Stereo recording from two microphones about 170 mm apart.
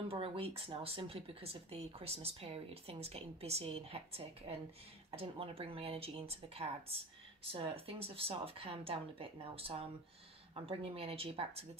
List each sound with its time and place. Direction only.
0.1 s speech: 35° right (ahead or behind)